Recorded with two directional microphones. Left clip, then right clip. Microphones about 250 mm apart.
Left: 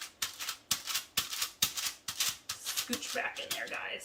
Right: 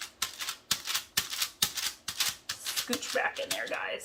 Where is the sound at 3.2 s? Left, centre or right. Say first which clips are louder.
Right 6 dB; centre.